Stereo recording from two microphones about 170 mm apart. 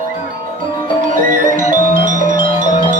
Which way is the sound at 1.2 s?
50° right (ahead or behind).